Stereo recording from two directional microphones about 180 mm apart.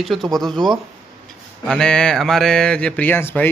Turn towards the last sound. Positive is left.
turn(degrees=10)  # may be behind; listen again after turning